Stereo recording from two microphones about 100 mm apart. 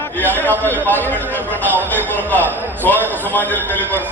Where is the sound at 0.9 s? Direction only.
20° left (ahead or behind).